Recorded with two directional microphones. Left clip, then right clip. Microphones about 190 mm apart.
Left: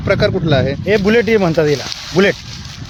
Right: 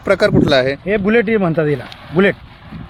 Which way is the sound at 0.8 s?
25° left (ahead or behind).